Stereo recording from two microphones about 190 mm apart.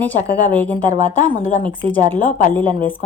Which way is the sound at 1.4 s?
40° left (ahead or behind).